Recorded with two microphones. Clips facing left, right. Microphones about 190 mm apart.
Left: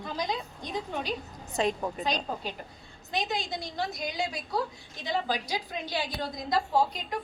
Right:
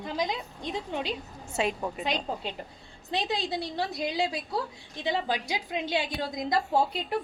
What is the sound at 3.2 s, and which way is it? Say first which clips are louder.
A woman's voice: right 2 dB; 30° right (ahead or behind).